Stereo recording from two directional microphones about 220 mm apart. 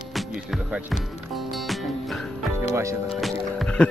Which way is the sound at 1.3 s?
Centre (ahead or behind).